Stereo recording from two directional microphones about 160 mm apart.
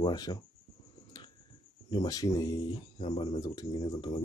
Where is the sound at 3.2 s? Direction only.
25° left (ahead or behind).